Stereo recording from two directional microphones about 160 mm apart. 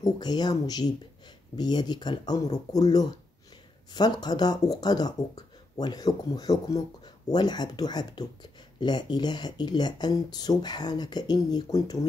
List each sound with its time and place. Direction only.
0.0 s speech: 25° left (ahead or behind)